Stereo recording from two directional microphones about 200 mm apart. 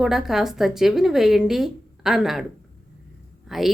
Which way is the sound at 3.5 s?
Centre (ahead or behind).